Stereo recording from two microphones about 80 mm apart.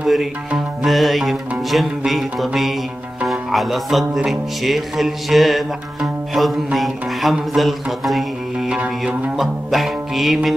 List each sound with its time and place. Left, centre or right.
0.0 s music: centre
9.4 s music: centre